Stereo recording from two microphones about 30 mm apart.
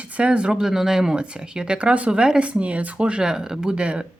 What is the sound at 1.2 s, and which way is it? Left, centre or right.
Speech, right.